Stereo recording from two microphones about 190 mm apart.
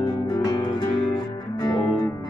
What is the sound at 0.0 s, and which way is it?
Music, 20° left (ahead or behind).